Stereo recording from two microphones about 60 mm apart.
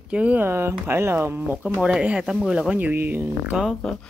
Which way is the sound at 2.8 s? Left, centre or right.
Right.